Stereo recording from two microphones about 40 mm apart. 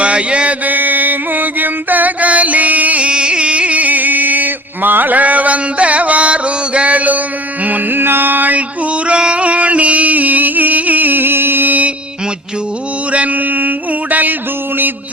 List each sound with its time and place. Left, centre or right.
0.0 s mantra: right
0.6 s mantra: right
3.1 s music: right
7.9 s music: right
8.5 s music: right
13.1 s mantra: right